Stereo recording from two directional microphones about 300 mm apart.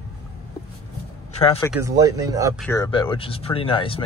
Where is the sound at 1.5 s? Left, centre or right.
Centre.